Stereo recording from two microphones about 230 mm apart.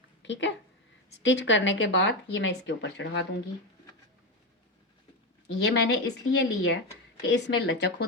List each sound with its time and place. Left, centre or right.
0.2 s speech: left
5.6 s speech: left